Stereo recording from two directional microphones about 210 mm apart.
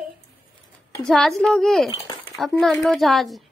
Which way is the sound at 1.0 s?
Centre (ahead or behind).